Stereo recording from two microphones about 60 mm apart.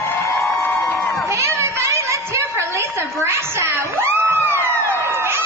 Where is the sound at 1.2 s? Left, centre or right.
Right.